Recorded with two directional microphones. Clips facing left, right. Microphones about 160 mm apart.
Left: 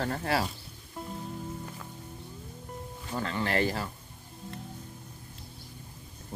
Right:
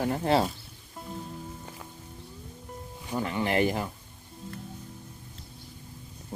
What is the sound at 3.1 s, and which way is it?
Speech, 15° right (ahead or behind).